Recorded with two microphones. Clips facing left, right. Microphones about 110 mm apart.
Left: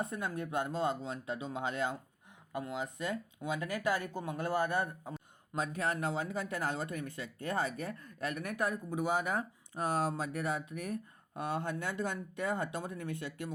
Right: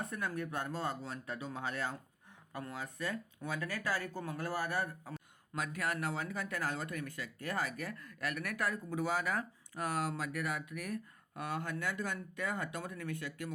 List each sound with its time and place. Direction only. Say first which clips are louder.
0.0 s speech: left 2 dB; 20° left (ahead or behind)